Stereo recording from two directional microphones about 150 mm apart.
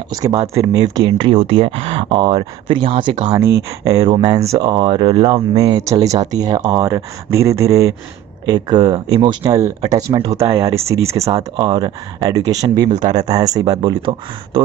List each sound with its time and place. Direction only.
0.6 s speech: 25° right (ahead or behind)
3.3 s speech: 15° right (ahead or behind)